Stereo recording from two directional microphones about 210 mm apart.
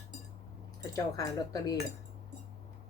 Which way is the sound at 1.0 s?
15° left (ahead or behind).